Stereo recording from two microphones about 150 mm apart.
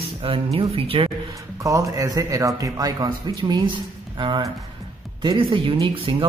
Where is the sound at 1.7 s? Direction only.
20° right (ahead or behind).